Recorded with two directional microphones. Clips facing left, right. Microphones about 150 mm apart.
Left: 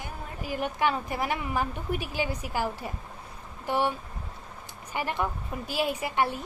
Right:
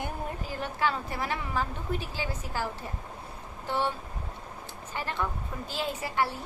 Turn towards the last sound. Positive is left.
turn(degrees=20)  # may be behind; listen again after turning